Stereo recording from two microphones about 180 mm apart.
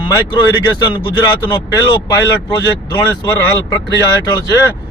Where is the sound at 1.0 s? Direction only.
25° left (ahead or behind).